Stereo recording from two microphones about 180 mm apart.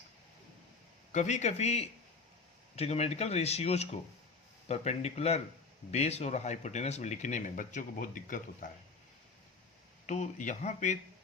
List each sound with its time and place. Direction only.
1.1 s speech: 40° left (ahead or behind)
10.1 s speech: 40° left (ahead or behind)